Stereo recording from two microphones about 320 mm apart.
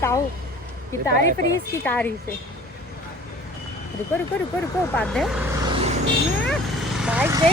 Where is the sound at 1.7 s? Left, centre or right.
Centre.